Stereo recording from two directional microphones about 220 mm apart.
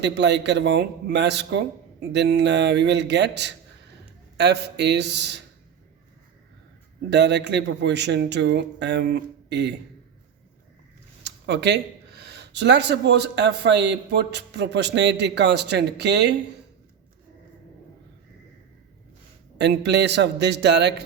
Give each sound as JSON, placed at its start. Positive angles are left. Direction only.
{"t": 0.0, "sound": "speech", "side_deg": -50}
{"t": 7.1, "sound": "speech", "side_deg": -50}
{"t": 11.2, "sound": "speech", "side_deg": -50}
{"t": 19.5, "sound": "speech", "side_deg": -50}